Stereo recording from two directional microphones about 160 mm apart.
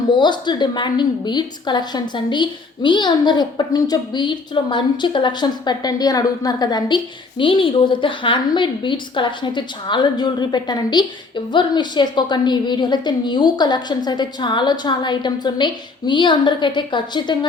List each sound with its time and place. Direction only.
0.2 s a woman's voice: 30° left (ahead or behind)